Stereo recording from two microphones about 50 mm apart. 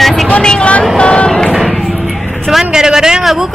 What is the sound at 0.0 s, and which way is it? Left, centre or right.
Vehicle, centre.